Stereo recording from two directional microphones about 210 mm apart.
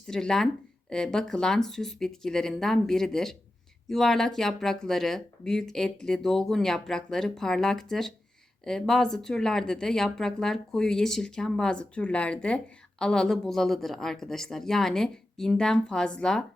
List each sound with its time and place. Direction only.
0.1 s speech: 5° left (ahead or behind)